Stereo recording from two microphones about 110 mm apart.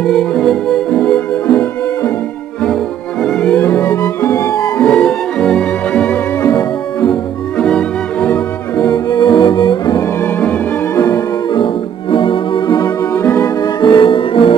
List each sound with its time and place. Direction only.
0.0 s music: 5° left (ahead or behind)
3.6 s music: 20° left (ahead or behind)
4.8 s music: 5° left (ahead or behind)
8.7 s music: 40° left (ahead or behind)
10.2 s music: 15° left (ahead or behind)
11.0 s music: 30° left (ahead or behind)
11.5 s music: 50° left (ahead or behind)
13.1 s music: 25° left (ahead or behind)
13.6 s music: 45° left (ahead or behind)